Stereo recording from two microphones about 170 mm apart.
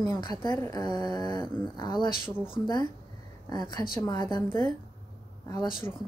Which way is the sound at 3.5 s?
25° left (ahead or behind).